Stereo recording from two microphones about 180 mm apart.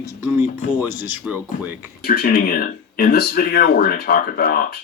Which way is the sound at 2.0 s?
60° left (ahead or behind).